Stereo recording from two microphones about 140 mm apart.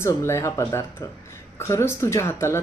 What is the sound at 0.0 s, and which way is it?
Speech, 20° left (ahead or behind).